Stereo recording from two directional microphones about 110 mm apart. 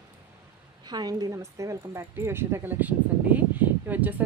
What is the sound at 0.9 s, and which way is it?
Speech, 35° right (ahead or behind).